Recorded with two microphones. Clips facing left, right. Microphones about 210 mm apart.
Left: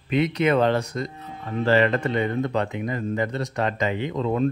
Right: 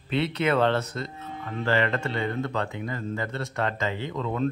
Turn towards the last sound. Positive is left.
turn(degrees=25)  # may be behind; listen again after turning